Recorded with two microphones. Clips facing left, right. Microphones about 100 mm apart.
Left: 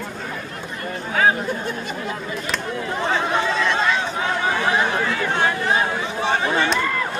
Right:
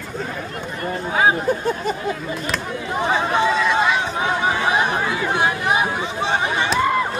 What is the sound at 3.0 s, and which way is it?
Chatter, 15° right (ahead or behind).